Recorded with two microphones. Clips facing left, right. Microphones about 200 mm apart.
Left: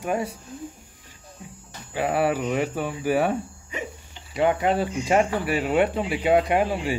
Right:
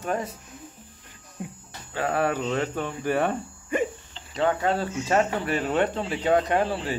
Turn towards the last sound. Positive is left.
turn(degrees=10)  # may be behind; listen again after turning